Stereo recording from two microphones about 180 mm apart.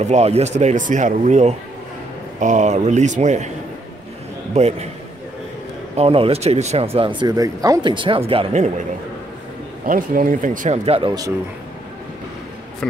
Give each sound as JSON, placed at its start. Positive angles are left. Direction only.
{"t": 0.0, "sound": "speech", "side_deg": -35}
{"t": 4.6, "sound": "speech", "side_deg": -35}
{"t": 5.9, "sound": "speech", "side_deg": -30}
{"t": 9.8, "sound": "speech", "side_deg": -50}
{"t": 10.9, "sound": "speech", "side_deg": -25}